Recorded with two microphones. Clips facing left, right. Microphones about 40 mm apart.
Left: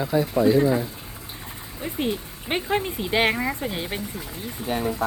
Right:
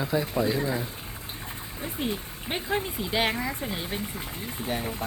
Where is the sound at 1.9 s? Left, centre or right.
Left.